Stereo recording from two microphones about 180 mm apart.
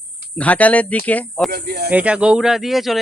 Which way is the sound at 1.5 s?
60° right (ahead or behind).